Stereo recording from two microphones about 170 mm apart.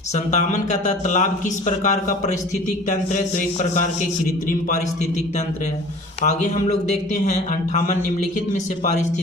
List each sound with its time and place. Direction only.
0.3 s a man's voice: 45° left (ahead or behind)
6.2 s a man's voice: 45° left (ahead or behind)